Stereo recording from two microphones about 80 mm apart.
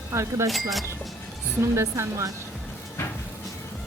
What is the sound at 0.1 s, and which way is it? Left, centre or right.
Speech, right.